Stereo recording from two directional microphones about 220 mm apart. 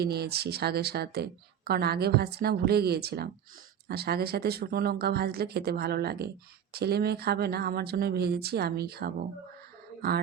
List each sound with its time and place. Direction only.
0.0 s speech: 45° right (ahead or behind)